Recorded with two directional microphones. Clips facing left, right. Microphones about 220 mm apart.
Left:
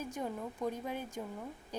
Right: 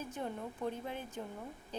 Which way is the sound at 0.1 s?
10° left (ahead or behind).